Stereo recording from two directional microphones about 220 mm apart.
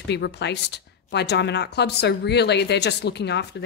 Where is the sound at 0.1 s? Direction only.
50° left (ahead or behind).